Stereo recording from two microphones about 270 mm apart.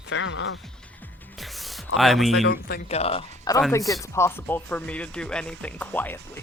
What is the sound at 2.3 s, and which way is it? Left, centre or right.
Speech, left.